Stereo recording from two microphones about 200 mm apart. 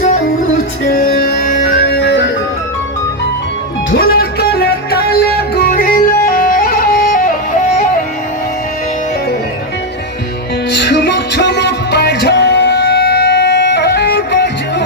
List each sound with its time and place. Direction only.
0.9 s music: 45° left (ahead or behind)
3.9 s music: 50° left (ahead or behind)
10.7 s music: 60° left (ahead or behind)